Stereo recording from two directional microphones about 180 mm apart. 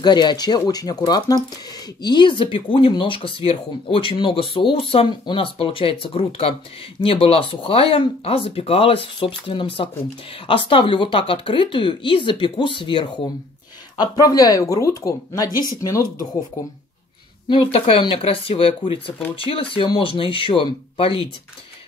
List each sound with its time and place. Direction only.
0.0 s speech: 25° left (ahead or behind)
17.5 s speech: 30° left (ahead or behind)